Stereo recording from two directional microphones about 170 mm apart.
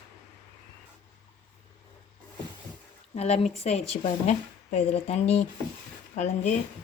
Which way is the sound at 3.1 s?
40° left (ahead or behind).